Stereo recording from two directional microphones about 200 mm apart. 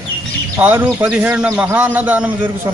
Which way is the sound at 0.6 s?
10° right (ahead or behind).